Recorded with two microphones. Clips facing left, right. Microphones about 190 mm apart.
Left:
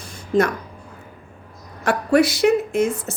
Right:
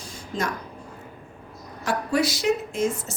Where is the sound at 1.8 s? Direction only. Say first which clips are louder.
Left 7 dB; 60° left (ahead or behind).